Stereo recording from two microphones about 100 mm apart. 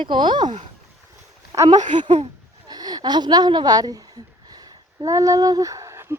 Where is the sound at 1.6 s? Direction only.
50° right (ahead or behind).